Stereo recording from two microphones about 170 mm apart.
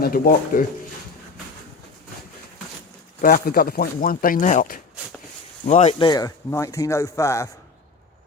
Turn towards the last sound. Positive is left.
turn(degrees=15)  # may be behind; listen again after turning